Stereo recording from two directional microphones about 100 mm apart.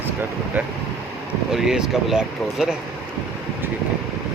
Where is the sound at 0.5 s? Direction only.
20° right (ahead or behind).